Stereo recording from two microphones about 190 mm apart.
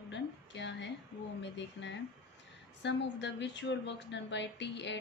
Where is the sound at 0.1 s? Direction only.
70° left (ahead or behind).